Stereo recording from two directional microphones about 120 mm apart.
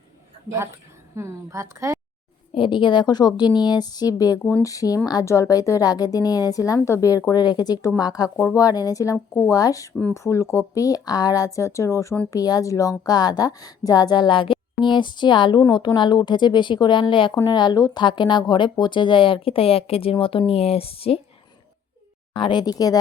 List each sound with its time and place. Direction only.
1.1 s a woman's voice: 25° right (ahead or behind)
2.6 s a woman's voice: 40° left (ahead or behind)
22.4 s a woman's voice: 40° left (ahead or behind)